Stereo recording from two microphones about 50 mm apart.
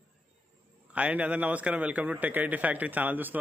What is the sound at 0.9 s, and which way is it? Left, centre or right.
A man's voice, right.